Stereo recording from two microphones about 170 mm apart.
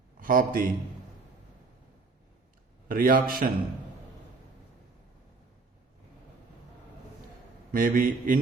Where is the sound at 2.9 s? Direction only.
55° right (ahead or behind).